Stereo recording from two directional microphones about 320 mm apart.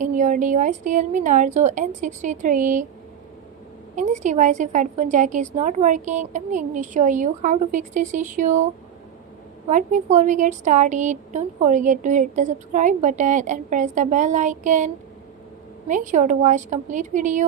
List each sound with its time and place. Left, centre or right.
0.0 s a woman's voice: right
3.9 s a woman's voice: right
9.6 s a woman's voice: right
15.9 s a woman's voice: right